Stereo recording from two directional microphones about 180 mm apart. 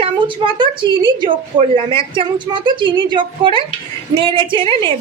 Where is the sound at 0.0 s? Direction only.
30° right (ahead or behind).